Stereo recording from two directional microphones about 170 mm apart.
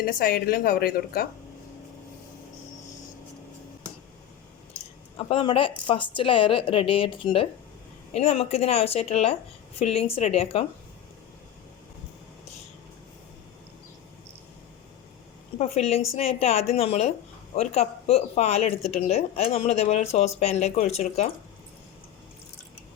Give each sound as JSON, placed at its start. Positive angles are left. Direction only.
{"t": 0.0, "sound": "a woman's voice", "side_deg": 60}
{"t": 5.1, "sound": "speech", "side_deg": 30}
{"t": 15.5, "sound": "speech", "side_deg": 40}